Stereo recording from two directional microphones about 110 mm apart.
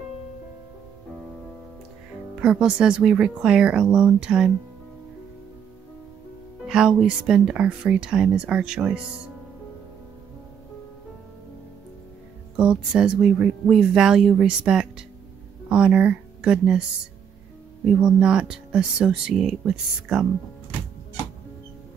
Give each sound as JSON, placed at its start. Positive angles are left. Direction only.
{"t": 2.4, "sound": "speech", "side_deg": -10}
{"t": 6.6, "sound": "speech", "side_deg": -5}
{"t": 12.5, "sound": "speech", "side_deg": -10}
{"t": 17.8, "sound": "speech", "side_deg": -10}